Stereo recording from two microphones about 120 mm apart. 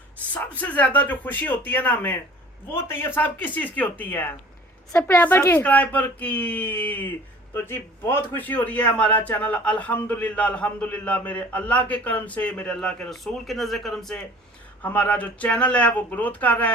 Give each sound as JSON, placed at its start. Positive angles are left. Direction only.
{"t": 0.6, "sound": "a man's voice", "side_deg": 10}